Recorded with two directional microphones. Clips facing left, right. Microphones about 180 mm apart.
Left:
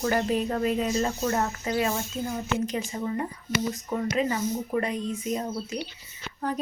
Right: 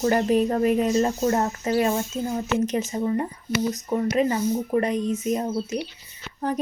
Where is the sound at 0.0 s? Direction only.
35° right (ahead or behind).